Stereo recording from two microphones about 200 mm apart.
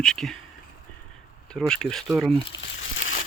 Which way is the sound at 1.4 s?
5° left (ahead or behind).